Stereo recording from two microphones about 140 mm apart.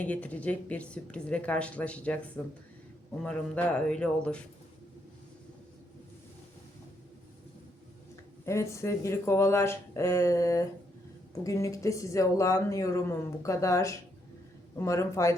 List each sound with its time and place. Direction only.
0.0 s a woman's voice: 10° left (ahead or behind)
8.1 s speech: 20° left (ahead or behind)